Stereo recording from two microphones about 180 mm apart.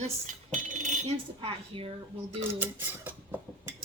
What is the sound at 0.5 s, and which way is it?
Dishes, 35° right (ahead or behind).